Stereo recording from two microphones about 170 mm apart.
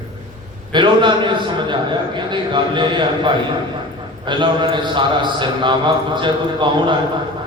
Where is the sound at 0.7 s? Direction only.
30° right (ahead or behind).